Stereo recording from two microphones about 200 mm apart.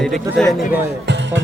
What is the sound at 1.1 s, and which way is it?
Music, 60° right (ahead or behind).